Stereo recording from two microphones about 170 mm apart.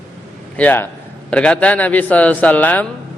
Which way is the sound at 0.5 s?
10° left (ahead or behind).